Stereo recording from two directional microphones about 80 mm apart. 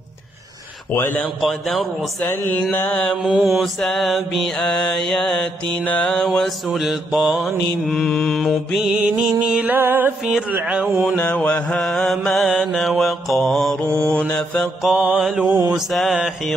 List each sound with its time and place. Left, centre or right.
0.9 s mantra: left
1.4 s mantra: centre
2.2 s mantra: left
3.3 s mantra: centre
4.6 s mantra: centre
6.2 s mantra: centre
9.4 s music: centre
9.8 s music: right
10.5 s music: centre
11.1 s mantra: centre
11.7 s mantra: centre
15.0 s music: centre
15.4 s mantra: right
15.9 s mantra: centre